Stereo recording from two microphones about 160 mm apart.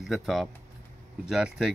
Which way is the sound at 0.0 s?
Centre (ahead or behind).